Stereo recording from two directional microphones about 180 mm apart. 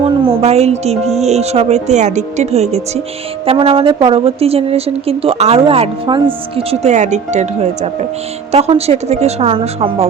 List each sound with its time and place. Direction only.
0.0 s speech: 35° right (ahead or behind)